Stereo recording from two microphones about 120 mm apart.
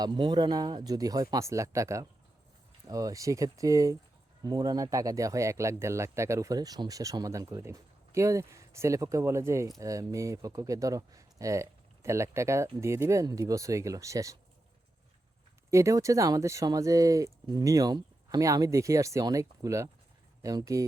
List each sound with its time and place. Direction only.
0.0 s speech: 40° right (ahead or behind)
15.7 s speech: 25° right (ahead or behind)